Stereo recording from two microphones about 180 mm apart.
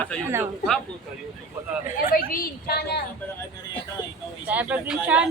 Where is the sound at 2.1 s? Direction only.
55° left (ahead or behind).